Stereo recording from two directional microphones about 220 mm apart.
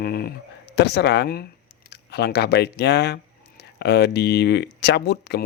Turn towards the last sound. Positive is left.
turn(degrees=50)  # may be behind; listen again after turning